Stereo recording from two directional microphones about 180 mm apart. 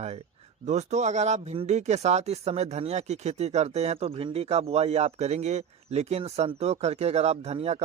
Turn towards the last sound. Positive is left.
turn(degrees=-35)  # may be behind; listen again after turning